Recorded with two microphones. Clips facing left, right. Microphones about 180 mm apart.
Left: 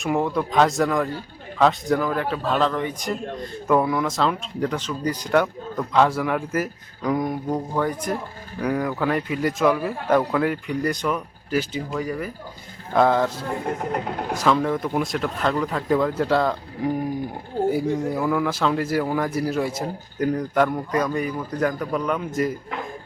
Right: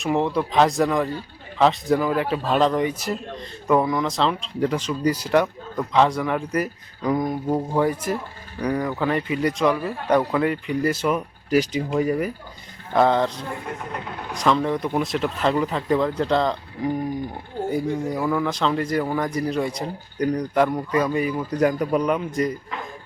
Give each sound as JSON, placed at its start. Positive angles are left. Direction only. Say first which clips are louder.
{"t": 0.0, "sound": "speech", "louder": "right 1 dB", "side_deg": 0}
{"t": 2.0, "sound": "a man's voice", "louder": "right 2 dB", "side_deg": -15}
{"t": 3.7, "sound": "speech", "louder": "even", "side_deg": 0}
{"t": 4.6, "sound": "a man's voice", "louder": "right 3 dB", "side_deg": -10}
{"t": 8.6, "sound": "speech", "louder": "even", "side_deg": 5}
{"t": 12.9, "sound": "speech", "louder": "even", "side_deg": 0}
{"t": 13.7, "sound": "speech", "louder": "left 6 dB", "side_deg": 45}
{"t": 14.3, "sound": "speech", "louder": "even", "side_deg": 5}
{"t": 17.7, "sound": "speech", "louder": "even", "side_deg": 5}
{"t": 22.2, "sound": "speech", "louder": "even", "side_deg": 0}